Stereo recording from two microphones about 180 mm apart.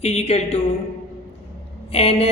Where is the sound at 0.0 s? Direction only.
35° left (ahead or behind).